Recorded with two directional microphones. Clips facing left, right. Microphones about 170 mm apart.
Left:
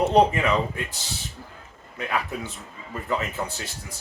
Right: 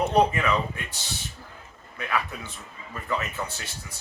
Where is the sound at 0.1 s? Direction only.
25° left (ahead or behind).